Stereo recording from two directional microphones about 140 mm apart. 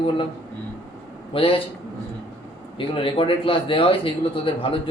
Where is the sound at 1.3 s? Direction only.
40° left (ahead or behind).